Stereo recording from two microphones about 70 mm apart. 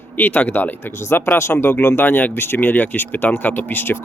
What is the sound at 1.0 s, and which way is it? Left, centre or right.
Speech, left.